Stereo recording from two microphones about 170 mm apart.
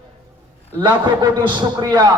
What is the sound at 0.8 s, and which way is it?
A man's voice, 25° right (ahead or behind).